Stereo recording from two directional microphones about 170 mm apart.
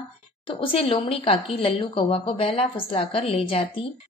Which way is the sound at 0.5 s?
30° left (ahead or behind).